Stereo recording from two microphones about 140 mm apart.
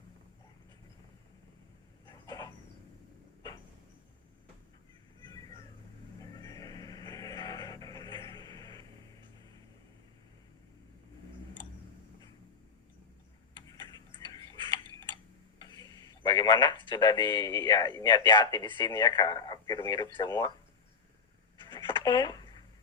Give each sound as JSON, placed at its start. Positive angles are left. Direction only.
{"t": 2.0, "sound": "vehicle", "side_deg": 30}
{"t": 6.3, "sound": "music", "side_deg": 25}
{"t": 13.7, "sound": "tick-tock", "side_deg": 35}
{"t": 18.3, "sound": "speech", "side_deg": 35}
{"t": 21.7, "sound": "a sound", "side_deg": 35}